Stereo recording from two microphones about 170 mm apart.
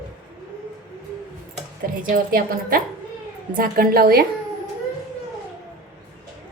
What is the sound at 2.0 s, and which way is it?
A woman's voice, 60° right (ahead or behind).